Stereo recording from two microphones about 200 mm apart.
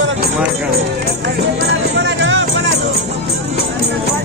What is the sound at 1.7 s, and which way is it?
Music, 65° right (ahead or behind).